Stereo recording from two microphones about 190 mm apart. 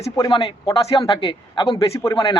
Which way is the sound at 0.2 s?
25° left (ahead or behind).